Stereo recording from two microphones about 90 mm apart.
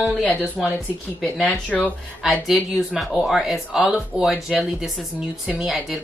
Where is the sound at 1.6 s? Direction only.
15° left (ahead or behind).